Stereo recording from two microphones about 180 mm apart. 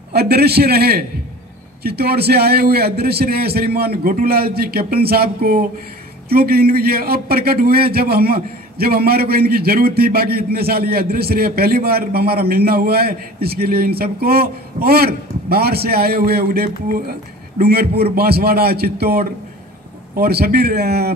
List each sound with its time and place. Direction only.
0.1 s a man's voice: 60° right (ahead or behind)